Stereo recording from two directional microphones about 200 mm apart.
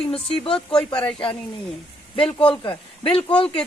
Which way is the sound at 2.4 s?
25° left (ahead or behind).